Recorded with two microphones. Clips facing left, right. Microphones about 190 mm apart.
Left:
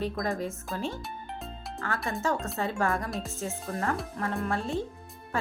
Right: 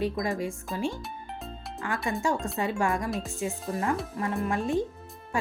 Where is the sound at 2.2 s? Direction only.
15° right (ahead or behind).